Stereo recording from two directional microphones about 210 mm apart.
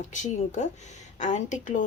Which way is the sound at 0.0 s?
35° left (ahead or behind).